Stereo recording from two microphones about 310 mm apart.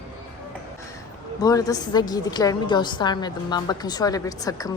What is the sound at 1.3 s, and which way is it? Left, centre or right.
Speech, centre.